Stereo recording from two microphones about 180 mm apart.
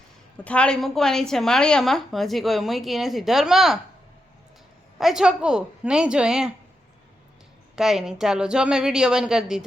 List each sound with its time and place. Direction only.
0.4 s a woman's voice: 5° left (ahead or behind)
4.9 s a woman's voice: centre (ahead or behind)
7.8 s a woman's voice: centre (ahead or behind)